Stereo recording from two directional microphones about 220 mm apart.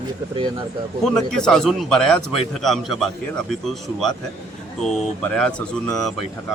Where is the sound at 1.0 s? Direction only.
5° left (ahead or behind).